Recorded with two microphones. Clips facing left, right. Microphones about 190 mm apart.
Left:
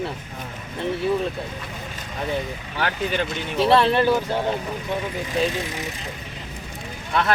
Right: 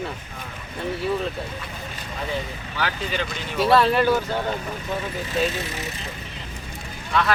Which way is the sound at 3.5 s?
25° left (ahead or behind).